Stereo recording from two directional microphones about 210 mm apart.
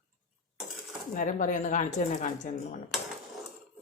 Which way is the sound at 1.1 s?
40° left (ahead or behind).